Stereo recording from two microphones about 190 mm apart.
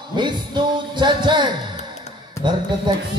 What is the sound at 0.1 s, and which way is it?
A man's voice, 25° right (ahead or behind).